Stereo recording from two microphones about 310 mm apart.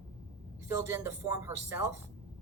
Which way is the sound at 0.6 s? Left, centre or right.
Centre.